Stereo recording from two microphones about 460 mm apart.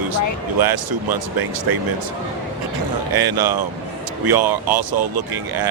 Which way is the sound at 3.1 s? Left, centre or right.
Right.